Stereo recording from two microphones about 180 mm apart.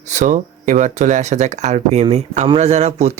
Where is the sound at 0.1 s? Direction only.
45° right (ahead or behind).